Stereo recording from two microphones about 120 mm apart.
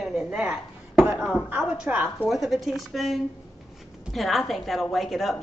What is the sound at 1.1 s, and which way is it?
Speech, 5° left (ahead or behind).